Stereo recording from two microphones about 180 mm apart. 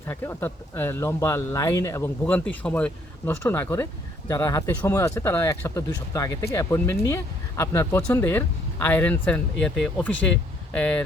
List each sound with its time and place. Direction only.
0.1 s speech: 10° left (ahead or behind)